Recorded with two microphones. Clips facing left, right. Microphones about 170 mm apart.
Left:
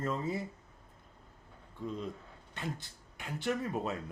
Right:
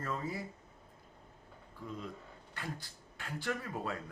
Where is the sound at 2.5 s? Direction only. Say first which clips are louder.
Left 3 dB; 20° left (ahead or behind).